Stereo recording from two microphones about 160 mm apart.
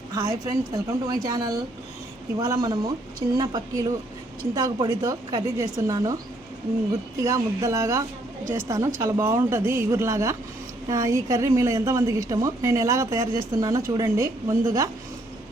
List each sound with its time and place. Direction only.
0.1 s a woman's voice: 20° right (ahead or behind)
7.2 s a woman's voice: 20° right (ahead or behind)